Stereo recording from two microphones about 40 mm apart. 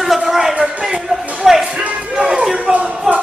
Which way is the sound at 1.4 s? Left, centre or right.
Centre.